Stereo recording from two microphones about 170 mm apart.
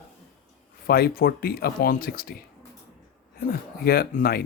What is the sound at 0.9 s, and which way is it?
Speech, 65° left (ahead or behind).